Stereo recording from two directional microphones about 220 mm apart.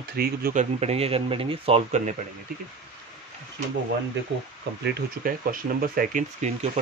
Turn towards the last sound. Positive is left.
turn(degrees=-35)  # may be behind; listen again after turning